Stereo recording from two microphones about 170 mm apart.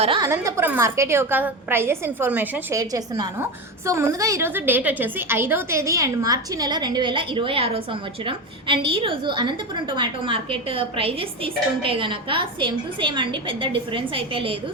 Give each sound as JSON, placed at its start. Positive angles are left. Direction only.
{"t": 0.2, "sound": "a woman's voice", "side_deg": -15}